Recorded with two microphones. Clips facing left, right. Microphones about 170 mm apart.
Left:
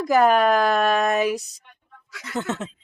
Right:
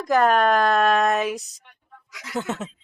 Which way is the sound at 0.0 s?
5° left (ahead or behind).